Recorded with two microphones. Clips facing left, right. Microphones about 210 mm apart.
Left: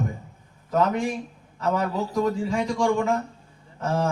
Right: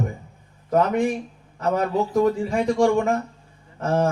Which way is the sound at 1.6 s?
55° right (ahead or behind).